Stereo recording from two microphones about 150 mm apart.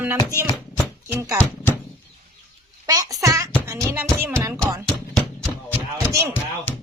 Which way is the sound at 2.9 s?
25° right (ahead or behind).